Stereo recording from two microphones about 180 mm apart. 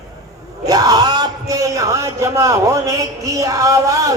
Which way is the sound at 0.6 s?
20° right (ahead or behind).